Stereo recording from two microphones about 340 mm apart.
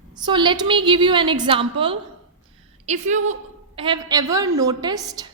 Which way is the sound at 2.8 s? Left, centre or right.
Centre.